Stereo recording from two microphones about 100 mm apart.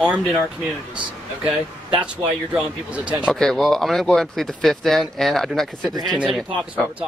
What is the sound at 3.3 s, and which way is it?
Speech, 5° left (ahead or behind).